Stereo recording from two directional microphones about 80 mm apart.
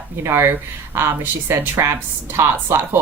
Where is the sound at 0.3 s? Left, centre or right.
Right.